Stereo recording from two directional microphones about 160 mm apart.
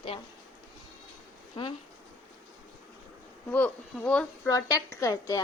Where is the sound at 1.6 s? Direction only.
30° left (ahead or behind).